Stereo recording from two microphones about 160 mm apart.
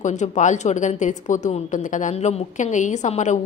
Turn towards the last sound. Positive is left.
turn(degrees=50)  # may be behind; listen again after turning